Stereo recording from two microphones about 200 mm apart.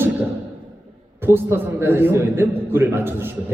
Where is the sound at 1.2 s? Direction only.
10° right (ahead or behind).